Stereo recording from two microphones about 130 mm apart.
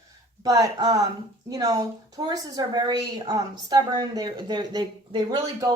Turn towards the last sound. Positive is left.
turn(degrees=-35)  # may be behind; listen again after turning